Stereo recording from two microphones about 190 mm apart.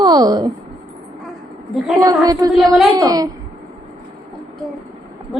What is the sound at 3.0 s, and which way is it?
Speech, 20° right (ahead or behind).